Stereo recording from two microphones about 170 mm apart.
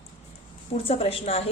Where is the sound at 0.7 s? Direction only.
35° left (ahead or behind).